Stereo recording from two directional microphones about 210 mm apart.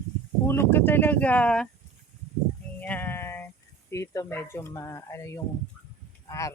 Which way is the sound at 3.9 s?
15° left (ahead or behind).